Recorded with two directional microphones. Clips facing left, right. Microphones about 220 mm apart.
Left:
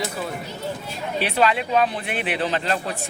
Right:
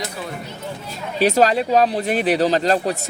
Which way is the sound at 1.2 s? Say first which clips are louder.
Right 6 dB; 40° right (ahead or behind).